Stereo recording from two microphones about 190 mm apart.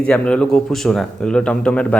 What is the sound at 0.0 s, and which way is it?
A man's voice, 5° left (ahead or behind).